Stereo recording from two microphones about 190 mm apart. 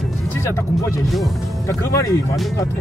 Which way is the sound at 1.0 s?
Centre (ahead or behind).